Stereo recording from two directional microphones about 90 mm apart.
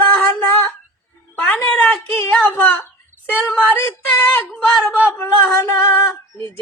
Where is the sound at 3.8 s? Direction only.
25° left (ahead or behind).